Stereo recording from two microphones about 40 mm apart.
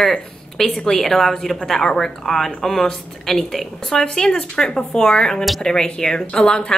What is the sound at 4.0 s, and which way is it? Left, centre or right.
Speech, centre.